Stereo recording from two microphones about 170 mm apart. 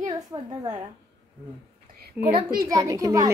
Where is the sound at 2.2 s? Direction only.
10° right (ahead or behind).